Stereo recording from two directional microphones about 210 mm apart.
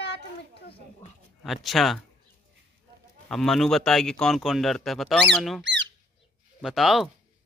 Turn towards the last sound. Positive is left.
turn(degrees=0)  # may be behind; listen again after turning